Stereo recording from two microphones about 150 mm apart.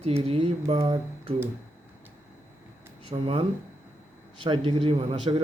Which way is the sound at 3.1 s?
35° right (ahead or behind).